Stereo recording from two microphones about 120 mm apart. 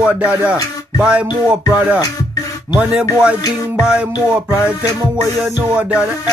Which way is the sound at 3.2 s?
5° right (ahead or behind).